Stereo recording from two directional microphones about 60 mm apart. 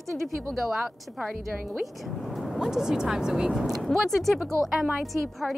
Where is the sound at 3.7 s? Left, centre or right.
Centre.